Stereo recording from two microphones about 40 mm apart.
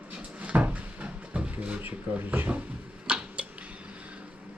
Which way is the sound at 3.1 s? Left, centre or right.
Right.